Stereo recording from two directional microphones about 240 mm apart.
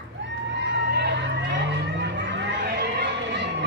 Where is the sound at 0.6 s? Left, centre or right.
Right.